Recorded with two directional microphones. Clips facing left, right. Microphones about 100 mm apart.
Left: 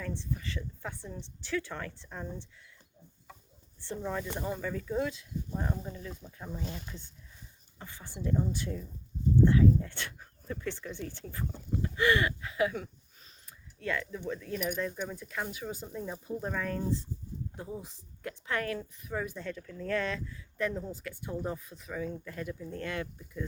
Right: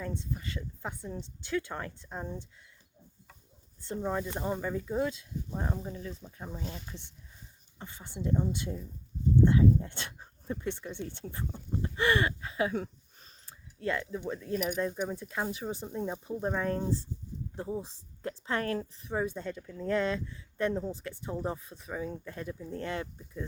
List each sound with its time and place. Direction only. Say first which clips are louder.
0.0 s speech: even; 20° right (ahead or behind)
4.0 s speech: right 2 dB; 20° right (ahead or behind)
7.8 s speech: right 1 dB; 20° right (ahead or behind)
13.4 s a sound: right 4 dB; 30° right (ahead or behind)
14.2 s speech: right 2 dB; 20° right (ahead or behind)
15.0 s speech: right 3 dB; 25° right (ahead or behind)